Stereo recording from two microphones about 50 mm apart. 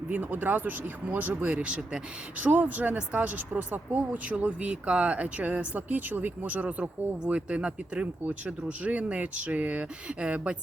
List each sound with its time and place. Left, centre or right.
0.1 s speech: right
2.4 s speech: right